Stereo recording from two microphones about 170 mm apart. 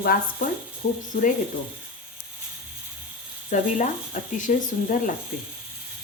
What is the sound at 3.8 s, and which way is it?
Speech, 50° left (ahead or behind).